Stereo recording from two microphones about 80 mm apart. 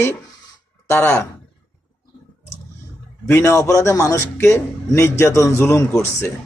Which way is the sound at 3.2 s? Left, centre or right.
Left.